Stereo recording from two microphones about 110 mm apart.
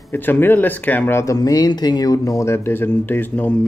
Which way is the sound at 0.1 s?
20° left (ahead or behind).